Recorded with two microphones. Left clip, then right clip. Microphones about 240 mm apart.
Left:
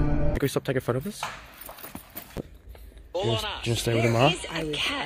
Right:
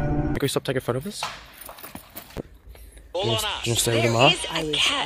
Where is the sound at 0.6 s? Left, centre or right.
Centre.